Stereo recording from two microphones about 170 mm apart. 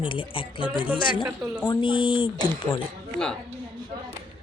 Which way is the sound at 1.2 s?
10° right (ahead or behind).